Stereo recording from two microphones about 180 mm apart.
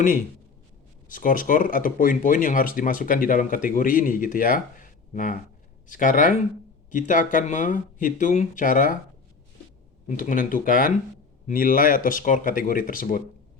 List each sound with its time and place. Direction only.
1.0 s speech: 50° left (ahead or behind)
10.1 s speech: 50° left (ahead or behind)